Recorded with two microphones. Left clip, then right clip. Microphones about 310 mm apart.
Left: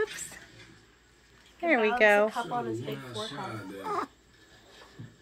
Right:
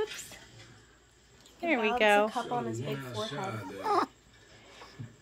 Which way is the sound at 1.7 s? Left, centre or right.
Right.